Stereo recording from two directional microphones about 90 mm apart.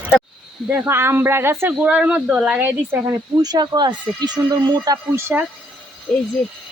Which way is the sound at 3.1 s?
50° right (ahead or behind).